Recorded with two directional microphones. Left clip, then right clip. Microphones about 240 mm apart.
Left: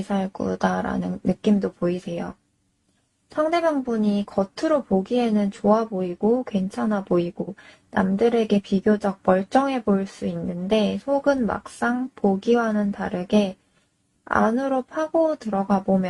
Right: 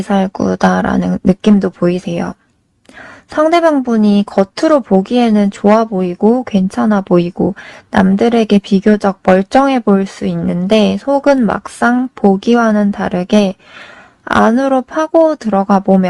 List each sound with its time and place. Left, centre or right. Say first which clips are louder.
0.1 s speech: right 12 dB; right
3.3 s speech: right 11 dB; right